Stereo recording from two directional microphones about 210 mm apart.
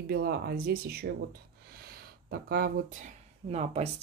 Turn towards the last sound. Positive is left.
turn(degrees=-30)  # may be behind; listen again after turning